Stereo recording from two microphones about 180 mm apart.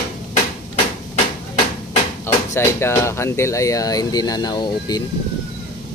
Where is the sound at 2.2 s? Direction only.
15° left (ahead or behind).